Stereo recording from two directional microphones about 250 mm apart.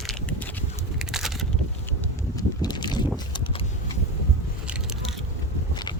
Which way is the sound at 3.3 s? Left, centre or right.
Left.